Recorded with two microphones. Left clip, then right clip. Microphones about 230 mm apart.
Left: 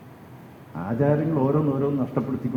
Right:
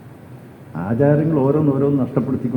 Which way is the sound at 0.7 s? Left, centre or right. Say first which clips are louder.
Right 6 dB; right.